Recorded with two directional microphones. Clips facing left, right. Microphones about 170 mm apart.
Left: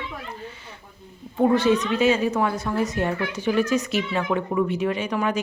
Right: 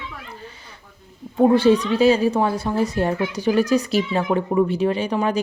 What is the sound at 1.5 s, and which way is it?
A woman's voice, 30° right (ahead or behind).